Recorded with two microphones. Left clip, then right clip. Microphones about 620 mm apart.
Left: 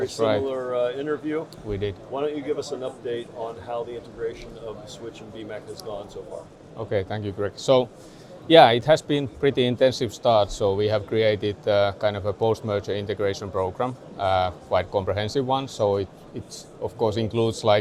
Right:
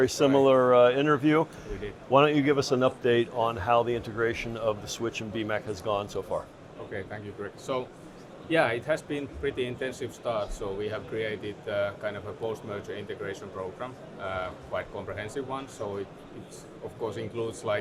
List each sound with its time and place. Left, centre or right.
0.0 s speech: right
2.1 s speech: right
6.9 s speech: left
17.1 s speech: left